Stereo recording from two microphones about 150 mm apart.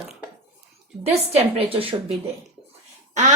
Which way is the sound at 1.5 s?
40° right (ahead or behind).